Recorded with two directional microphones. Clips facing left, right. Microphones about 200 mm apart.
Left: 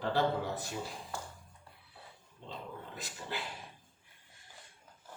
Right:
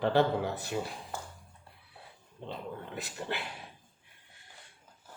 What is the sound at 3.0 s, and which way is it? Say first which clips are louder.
Speech: right 5 dB; 60° right (ahead or behind).